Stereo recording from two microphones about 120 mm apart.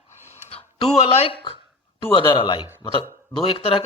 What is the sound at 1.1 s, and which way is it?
Speech, 55° left (ahead or behind).